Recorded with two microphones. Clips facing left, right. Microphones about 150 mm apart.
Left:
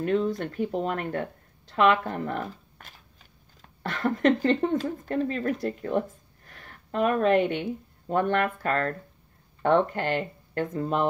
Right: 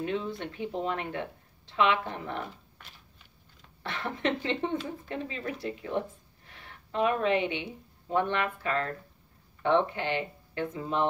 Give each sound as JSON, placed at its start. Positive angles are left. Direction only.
{"t": 0.0, "sound": "speech", "side_deg": 45}